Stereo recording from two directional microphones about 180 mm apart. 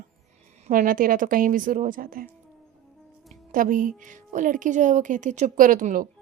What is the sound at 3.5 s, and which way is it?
A woman's voice, 50° right (ahead or behind).